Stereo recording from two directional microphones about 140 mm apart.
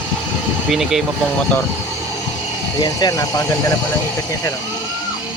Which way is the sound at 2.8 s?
25° left (ahead or behind).